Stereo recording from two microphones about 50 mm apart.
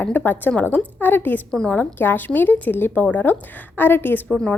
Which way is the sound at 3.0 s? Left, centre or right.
Left.